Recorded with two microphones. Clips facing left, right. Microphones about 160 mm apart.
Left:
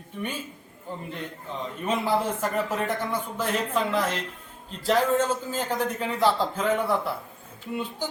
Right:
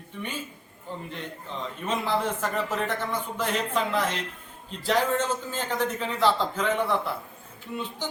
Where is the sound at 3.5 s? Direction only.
5° left (ahead or behind).